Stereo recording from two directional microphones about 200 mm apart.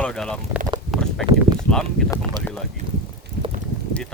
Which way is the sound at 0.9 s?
Centre (ahead or behind).